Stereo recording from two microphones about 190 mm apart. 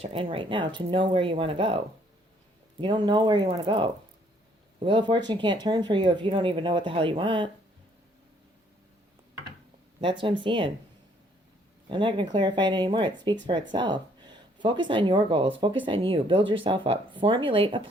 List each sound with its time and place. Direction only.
0.0 s speech: 30° right (ahead or behind)
2.8 s speech: 25° right (ahead or behind)
10.0 s speech: 25° right (ahead or behind)
11.9 s speech: 25° right (ahead or behind)